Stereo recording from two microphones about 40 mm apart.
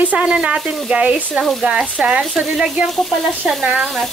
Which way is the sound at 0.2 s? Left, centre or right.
Right.